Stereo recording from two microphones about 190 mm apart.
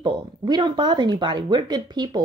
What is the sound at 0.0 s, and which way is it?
Speech, 25° right (ahead or behind).